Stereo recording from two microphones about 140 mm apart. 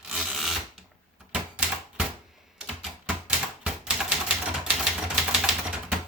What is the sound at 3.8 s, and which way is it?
Typewriter, 5° right (ahead or behind).